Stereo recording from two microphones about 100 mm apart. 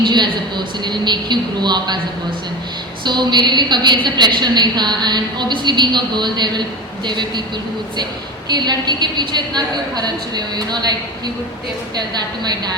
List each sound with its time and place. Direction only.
0.0 s a woman's voice: 50° right (ahead or behind)
3.0 s a woman's voice: 45° right (ahead or behind)
8.4 s a woman's voice: 45° right (ahead or behind)